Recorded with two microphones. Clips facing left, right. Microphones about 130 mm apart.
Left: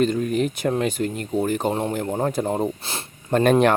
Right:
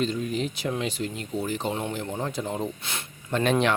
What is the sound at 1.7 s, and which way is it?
Speech, 35° left (ahead or behind).